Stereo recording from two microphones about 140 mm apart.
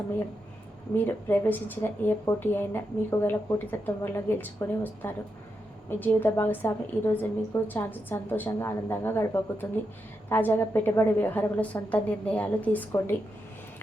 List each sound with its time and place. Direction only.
0.9 s a woman's voice: 15° left (ahead or behind)